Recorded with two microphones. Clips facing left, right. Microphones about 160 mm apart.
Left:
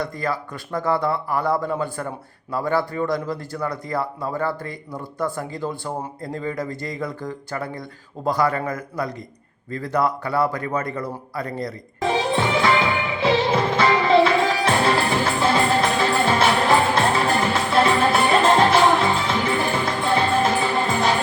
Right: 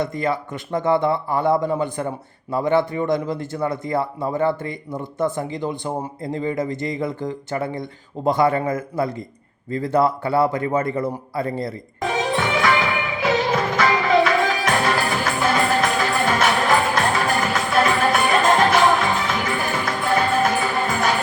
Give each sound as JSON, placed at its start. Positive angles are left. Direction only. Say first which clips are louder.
{"t": 0.0, "sound": "speech", "louder": "right 3 dB", "side_deg": -25}
{"t": 11.9, "sound": "music", "louder": "left 1 dB", "side_deg": 25}